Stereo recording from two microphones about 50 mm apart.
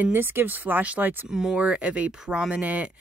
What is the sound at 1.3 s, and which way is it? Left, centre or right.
Speech, centre.